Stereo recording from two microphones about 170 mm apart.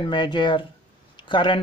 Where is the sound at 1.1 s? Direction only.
30° left (ahead or behind).